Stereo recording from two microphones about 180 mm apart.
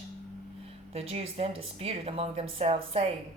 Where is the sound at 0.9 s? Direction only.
35° right (ahead or behind).